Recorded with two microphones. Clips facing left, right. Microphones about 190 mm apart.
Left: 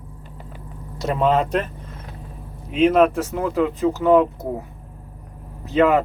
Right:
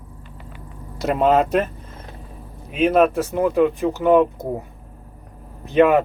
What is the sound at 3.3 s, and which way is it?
Speech, 20° right (ahead or behind).